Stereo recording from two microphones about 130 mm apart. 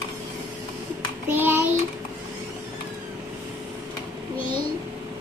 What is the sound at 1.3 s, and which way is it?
Child singing, 15° right (ahead or behind).